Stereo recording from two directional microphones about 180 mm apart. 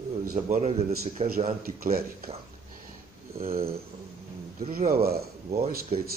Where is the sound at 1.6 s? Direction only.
55° right (ahead or behind).